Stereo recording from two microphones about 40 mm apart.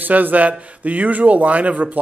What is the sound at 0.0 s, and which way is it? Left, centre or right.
A man's voice, right.